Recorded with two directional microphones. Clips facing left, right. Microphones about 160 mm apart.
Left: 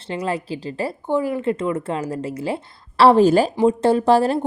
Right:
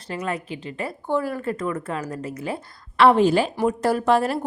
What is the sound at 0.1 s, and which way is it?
Speech, 30° left (ahead or behind).